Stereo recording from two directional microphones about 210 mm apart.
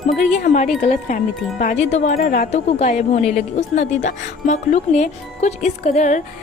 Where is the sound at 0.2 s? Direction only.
35° left (ahead or behind).